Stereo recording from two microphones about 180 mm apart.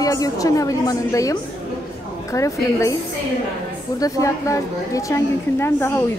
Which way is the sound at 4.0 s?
20° left (ahead or behind).